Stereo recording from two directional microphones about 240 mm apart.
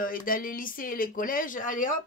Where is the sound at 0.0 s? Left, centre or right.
Left.